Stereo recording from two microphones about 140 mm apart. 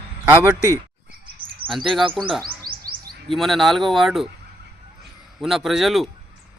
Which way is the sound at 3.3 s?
Centre (ahead or behind).